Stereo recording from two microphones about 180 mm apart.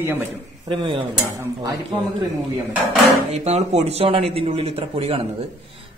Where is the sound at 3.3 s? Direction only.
40° right (ahead or behind).